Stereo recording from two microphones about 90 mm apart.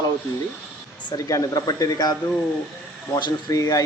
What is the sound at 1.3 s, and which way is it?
Speech, 45° left (ahead or behind).